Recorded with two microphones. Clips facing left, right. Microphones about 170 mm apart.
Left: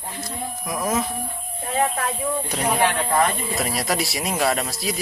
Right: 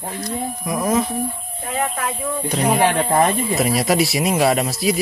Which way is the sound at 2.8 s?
30° right (ahead or behind).